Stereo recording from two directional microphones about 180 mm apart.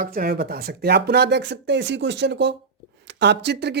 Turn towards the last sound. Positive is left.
turn(degrees=-70)  # may be behind; listen again after turning